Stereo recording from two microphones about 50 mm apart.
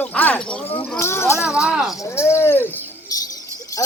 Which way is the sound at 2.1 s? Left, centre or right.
Left.